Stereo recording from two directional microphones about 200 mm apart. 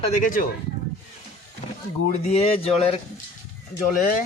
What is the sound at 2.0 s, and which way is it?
Speech, 30° left (ahead or behind).